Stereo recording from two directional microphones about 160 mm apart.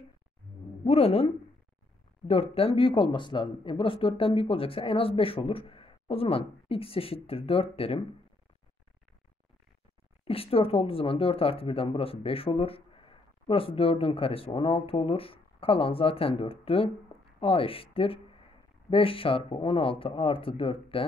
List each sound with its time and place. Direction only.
0.8 s speech: 40° left (ahead or behind)
10.2 s speech: 35° left (ahead or behind)